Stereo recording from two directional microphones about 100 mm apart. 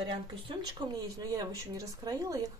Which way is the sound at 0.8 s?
45° right (ahead or behind).